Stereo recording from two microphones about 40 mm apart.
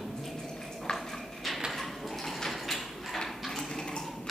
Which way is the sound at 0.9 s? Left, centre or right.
Left.